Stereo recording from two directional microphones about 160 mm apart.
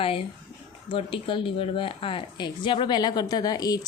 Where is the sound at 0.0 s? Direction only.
35° left (ahead or behind).